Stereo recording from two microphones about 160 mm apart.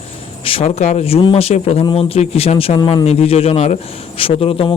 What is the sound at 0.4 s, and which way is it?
Speech, 40° left (ahead or behind).